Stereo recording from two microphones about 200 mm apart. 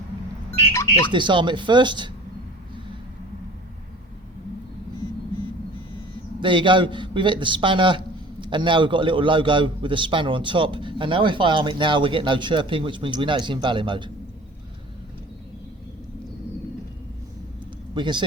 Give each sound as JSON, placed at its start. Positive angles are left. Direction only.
{"t": 1.1, "sound": "a man's voice", "side_deg": -25}
{"t": 6.4, "sound": "a man's voice", "side_deg": -25}
{"t": 17.9, "sound": "a man's voice", "side_deg": -25}